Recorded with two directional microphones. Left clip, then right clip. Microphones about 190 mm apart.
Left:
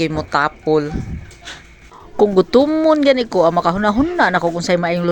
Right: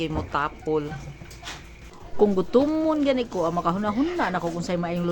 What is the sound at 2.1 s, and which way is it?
Speech, 30° left (ahead or behind).